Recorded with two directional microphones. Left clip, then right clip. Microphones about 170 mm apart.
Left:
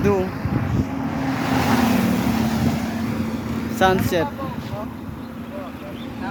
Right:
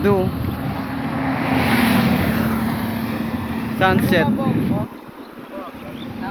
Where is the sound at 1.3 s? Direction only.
35° left (ahead or behind).